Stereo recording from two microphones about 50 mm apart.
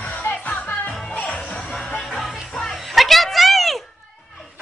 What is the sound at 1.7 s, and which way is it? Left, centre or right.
Music, centre.